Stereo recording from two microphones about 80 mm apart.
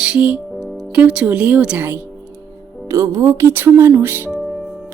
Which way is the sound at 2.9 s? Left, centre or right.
Right.